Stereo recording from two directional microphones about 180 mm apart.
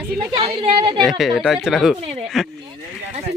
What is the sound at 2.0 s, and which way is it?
Speech, 35° right (ahead or behind).